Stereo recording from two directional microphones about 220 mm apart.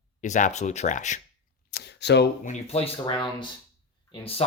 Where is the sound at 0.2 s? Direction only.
35° left (ahead or behind).